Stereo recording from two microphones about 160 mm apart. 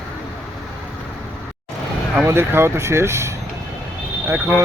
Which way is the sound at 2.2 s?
15° right (ahead or behind).